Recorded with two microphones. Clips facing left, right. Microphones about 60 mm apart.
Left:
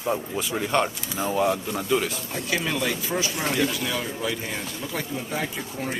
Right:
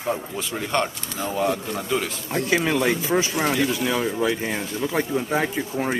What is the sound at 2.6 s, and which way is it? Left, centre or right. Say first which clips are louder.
Speech: right 5 dB; right.